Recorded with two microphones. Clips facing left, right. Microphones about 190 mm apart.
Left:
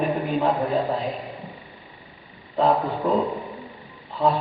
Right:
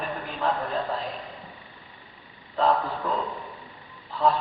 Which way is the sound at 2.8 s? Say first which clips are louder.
Left 7 dB; 25° left (ahead or behind).